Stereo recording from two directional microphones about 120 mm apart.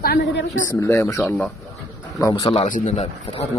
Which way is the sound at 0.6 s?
25° left (ahead or behind).